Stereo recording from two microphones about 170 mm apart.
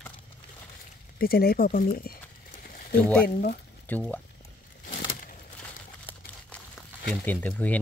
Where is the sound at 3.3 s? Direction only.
55° left (ahead or behind).